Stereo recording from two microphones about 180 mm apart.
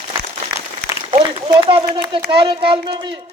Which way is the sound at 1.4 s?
25° right (ahead or behind).